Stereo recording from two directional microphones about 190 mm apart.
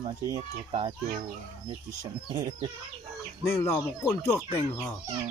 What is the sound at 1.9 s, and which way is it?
Speech, 20° right (ahead or behind).